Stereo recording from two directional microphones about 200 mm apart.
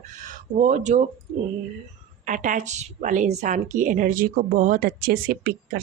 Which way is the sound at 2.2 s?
40° right (ahead or behind).